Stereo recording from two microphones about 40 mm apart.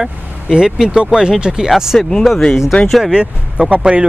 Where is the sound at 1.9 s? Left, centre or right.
Centre.